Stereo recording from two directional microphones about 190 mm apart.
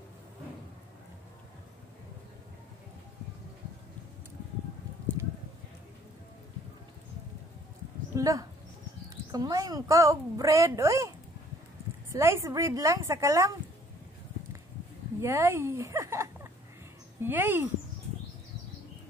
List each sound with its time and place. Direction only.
8.2 s a woman's voice: 20° right (ahead or behind)
12.1 s a woman's voice: 15° right (ahead or behind)
15.1 s a woman's voice: 15° right (ahead or behind)